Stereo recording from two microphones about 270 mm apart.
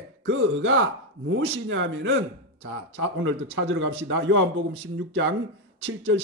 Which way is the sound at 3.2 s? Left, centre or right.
Right.